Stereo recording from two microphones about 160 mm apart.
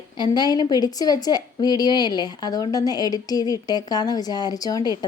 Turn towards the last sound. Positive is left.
turn(degrees=25)  # may be behind; listen again after turning